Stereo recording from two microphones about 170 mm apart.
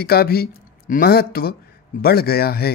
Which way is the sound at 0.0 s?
65° left (ahead or behind).